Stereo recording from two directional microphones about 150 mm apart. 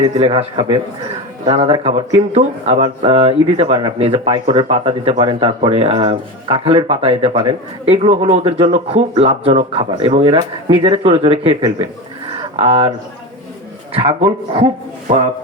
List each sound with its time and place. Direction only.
0.0 s speech: 45° right (ahead or behind)
13.9 s speech: 40° right (ahead or behind)